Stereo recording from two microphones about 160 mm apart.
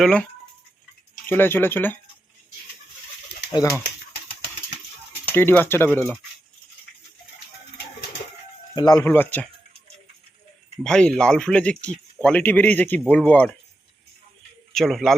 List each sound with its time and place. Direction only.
0.0 s a man's voice: 5° left (ahead or behind)
1.3 s speech: 10° left (ahead or behind)
3.5 s speech: 25° left (ahead or behind)
5.3 s speech: 15° left (ahead or behind)
8.7 s speech: 25° left (ahead or behind)
10.8 s speech: 5° left (ahead or behind)
14.8 s a man's voice: centre (ahead or behind)